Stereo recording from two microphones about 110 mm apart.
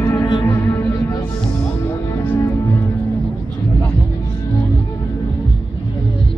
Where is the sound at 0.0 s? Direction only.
20° left (ahead or behind).